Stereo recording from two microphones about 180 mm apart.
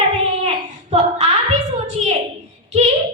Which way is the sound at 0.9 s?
35° right (ahead or behind).